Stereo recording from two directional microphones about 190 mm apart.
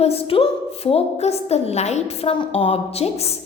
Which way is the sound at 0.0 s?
30° left (ahead or behind).